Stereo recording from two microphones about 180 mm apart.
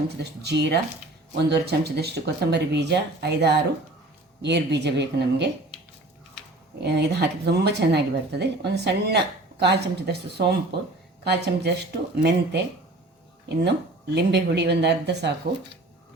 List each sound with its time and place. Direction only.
0.2 s speech: 70° right (ahead or behind)
6.7 s speech: 65° right (ahead or behind)